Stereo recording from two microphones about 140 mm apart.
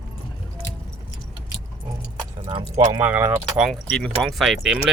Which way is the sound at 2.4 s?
35° right (ahead or behind).